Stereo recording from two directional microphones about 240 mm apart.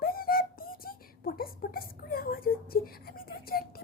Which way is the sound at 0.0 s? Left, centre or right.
Left.